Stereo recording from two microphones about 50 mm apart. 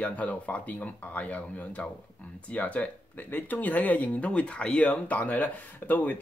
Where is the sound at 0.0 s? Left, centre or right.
Left.